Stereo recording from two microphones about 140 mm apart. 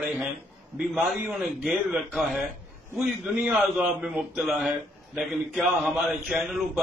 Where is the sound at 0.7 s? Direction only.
Centre (ahead or behind).